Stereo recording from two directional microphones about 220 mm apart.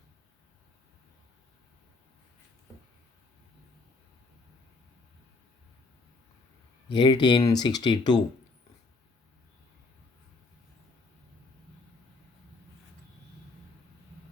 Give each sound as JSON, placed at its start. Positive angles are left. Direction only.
{"t": 6.8, "sound": "speech", "side_deg": 20}